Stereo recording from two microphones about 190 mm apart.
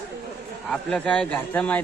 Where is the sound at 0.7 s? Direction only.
5° left (ahead or behind).